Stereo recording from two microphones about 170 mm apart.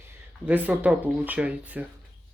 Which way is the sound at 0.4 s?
10° right (ahead or behind).